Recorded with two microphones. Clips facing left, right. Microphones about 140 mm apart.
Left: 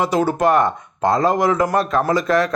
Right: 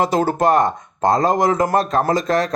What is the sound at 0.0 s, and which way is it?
Speech, 40° right (ahead or behind).